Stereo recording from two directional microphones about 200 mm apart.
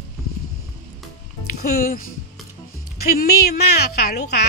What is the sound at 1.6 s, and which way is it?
Speech, 50° left (ahead or behind).